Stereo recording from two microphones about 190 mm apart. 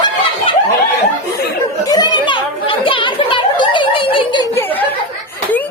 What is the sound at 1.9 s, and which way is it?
Children playing, 20° left (ahead or behind).